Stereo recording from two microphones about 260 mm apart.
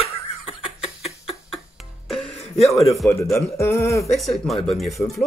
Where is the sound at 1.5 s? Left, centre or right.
Centre.